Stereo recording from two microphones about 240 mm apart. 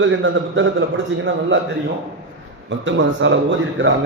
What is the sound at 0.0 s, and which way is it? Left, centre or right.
A man's voice, right.